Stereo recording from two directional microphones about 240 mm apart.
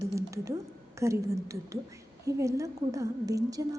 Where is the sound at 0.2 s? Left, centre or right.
Centre.